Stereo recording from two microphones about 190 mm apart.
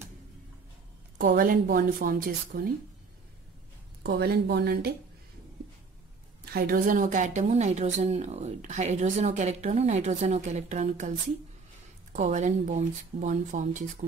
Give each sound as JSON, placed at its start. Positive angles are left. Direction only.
{"t": 1.1, "sound": "a woman's voice", "side_deg": -50}
{"t": 4.0, "sound": "speech", "side_deg": -55}
{"t": 6.4, "sound": "a woman's voice", "side_deg": -50}